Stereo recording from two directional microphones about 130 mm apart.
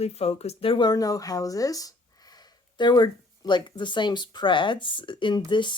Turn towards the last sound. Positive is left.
turn(degrees=35)  # may be behind; listen again after turning